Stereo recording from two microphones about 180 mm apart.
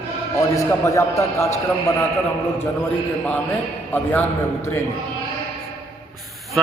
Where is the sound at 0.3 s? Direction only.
15° left (ahead or behind).